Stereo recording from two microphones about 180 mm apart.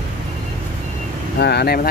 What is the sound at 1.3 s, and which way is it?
Speech, 65° left (ahead or behind).